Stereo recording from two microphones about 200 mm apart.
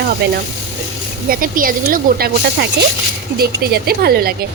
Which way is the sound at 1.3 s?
45° right (ahead or behind).